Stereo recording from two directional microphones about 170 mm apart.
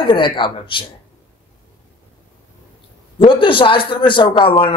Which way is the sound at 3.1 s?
30° left (ahead or behind).